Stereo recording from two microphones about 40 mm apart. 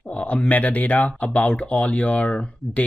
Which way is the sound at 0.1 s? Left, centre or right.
Left.